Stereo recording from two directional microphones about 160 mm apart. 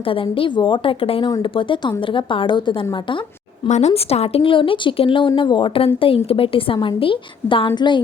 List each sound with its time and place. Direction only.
0.0 s a woman's voice: 35° left (ahead or behind)
3.7 s a woman's voice: 45° left (ahead or behind); by 8.0 s 30° left (ahead or behind)